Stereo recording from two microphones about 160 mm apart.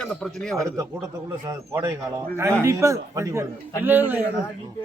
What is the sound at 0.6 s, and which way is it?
A man's voice, 20° right (ahead or behind).